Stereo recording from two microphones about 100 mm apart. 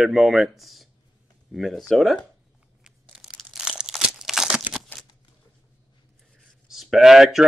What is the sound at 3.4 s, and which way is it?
Crumpling, 5° right (ahead or behind).